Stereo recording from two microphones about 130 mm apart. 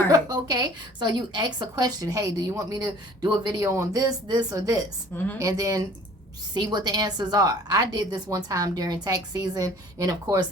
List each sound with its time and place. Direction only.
0.1 s a woman's voice: 30° right (ahead or behind)